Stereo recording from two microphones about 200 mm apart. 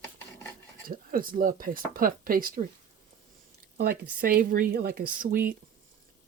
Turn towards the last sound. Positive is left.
turn(degrees=-45)  # may be behind; listen again after turning